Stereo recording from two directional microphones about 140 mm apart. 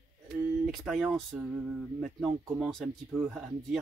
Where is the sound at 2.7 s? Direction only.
Centre (ahead or behind).